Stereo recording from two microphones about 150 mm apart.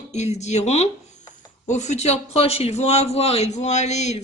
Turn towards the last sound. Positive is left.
turn(degrees=50)  # may be behind; listen again after turning